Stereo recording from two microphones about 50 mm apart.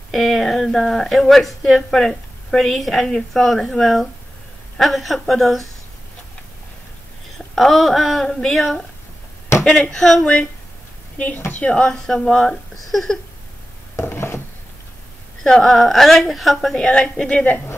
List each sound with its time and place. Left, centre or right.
0.1 s a woman's voice: centre
7.3 s a woman's voice: centre
9.7 s speech: centre
11.1 s speech: left
11.6 s a woman's voice: centre
12.1 s speech: centre
13.9 s a sound: left
15.4 s speech: centre
16.7 s a woman's voice: centre